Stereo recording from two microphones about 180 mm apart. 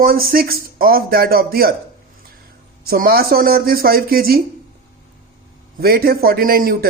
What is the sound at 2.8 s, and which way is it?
A man's voice, 55° right (ahead or behind).